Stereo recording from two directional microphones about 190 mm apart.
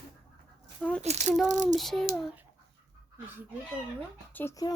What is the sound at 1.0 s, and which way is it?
Speech, 35° right (ahead or behind).